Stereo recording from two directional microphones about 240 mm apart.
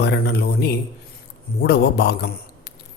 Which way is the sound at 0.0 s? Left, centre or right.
Left.